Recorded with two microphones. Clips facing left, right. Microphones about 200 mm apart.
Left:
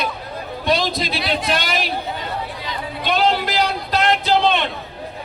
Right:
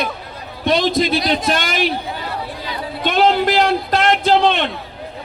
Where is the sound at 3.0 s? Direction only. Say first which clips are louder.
Right 4 dB; 50° right (ahead or behind).